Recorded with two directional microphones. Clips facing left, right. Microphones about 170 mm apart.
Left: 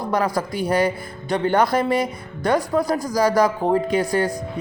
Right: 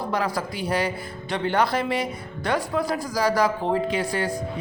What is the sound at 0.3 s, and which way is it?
A man's voice, 45° left (ahead or behind).